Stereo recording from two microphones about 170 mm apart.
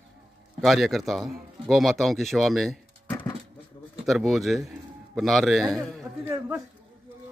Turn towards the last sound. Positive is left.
turn(degrees=-15)  # may be behind; listen again after turning